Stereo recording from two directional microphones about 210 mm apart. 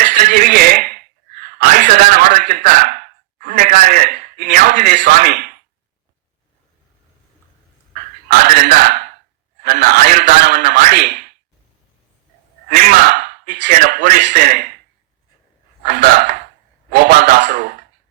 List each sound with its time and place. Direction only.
0.0 s a sound: 50° right (ahead or behind)
8.3 s a man's voice: 45° right (ahead or behind)
12.7 s a man's voice: 45° right (ahead or behind)
15.8 s a man's voice: 40° right (ahead or behind)